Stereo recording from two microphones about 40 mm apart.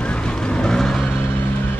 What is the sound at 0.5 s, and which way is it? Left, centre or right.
Vehicle, centre.